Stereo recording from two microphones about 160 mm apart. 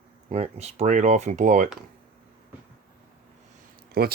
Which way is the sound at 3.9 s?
75° right (ahead or behind).